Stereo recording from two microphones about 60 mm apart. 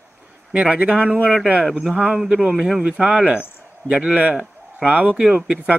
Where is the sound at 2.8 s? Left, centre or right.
Centre.